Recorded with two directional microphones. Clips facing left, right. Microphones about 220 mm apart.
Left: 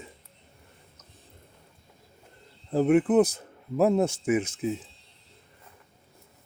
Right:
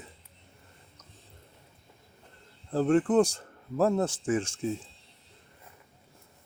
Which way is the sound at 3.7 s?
20° left (ahead or behind).